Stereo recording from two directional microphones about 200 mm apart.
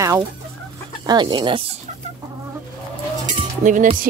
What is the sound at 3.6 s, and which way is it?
Speech, 40° right (ahead or behind).